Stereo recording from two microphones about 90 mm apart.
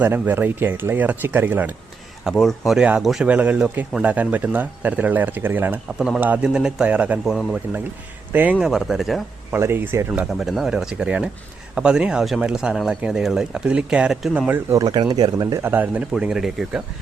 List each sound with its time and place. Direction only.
0.0 s speech: 20° right (ahead or behind)
2.2 s speech: 5° left (ahead or behind)
2.7 s speech: 15° right (ahead or behind)
3.0 s speech: centre (ahead or behind)
3.2 s speech: 15° right (ahead or behind)
7.3 s speech: 5° right (ahead or behind)
8.3 s speech: 20° right (ahead or behind)
8.6 s speech: 5° right (ahead or behind)
9.5 s speech: 25° right (ahead or behind)
10.3 s speech: 5° right (ahead or behind)
14.3 s speech: 20° right (ahead or behind)
14.7 s speech: 45° right (ahead or behind)
15.5 s speech: 25° right (ahead or behind); by 16.8 s 5° right (ahead or behind)